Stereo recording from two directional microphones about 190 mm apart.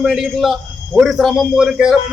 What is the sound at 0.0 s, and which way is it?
A man's voice, centre (ahead or behind).